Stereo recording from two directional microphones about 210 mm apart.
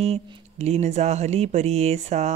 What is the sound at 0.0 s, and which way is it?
Speech, 30° right (ahead or behind).